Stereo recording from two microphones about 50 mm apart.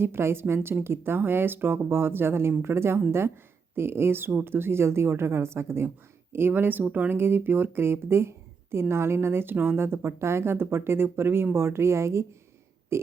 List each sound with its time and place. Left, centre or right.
0.0 s speech: right
2.5 s speech: right
2.7 s speech: right
6.3 s speech: right
12.9 s burping: right